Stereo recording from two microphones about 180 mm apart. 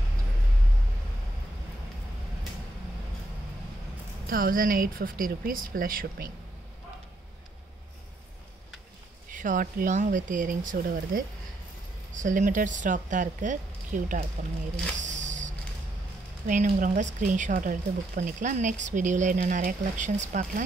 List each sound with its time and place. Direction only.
4.3 s speech: 50° right (ahead or behind)
9.3 s speech: 45° right (ahead or behind)
15.0 s a sound: 40° right (ahead or behind)
16.4 s speech: 45° right (ahead or behind)